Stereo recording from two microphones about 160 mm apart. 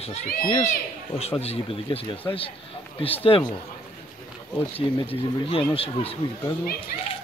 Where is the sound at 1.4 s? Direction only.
40° left (ahead or behind).